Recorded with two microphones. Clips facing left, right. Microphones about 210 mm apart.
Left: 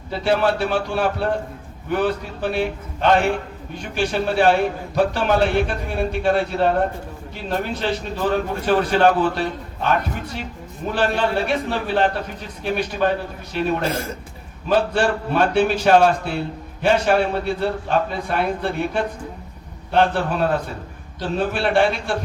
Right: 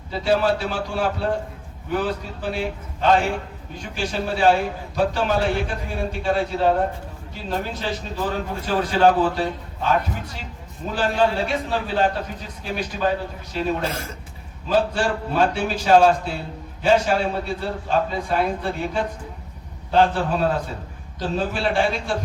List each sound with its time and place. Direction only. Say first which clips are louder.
0.1 s a man's voice: left 1 dB; 65° left (ahead or behind)
10.9 s a man's voice: even; 65° left (ahead or behind)